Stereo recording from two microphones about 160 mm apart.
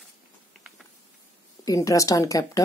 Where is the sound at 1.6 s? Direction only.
20° left (ahead or behind).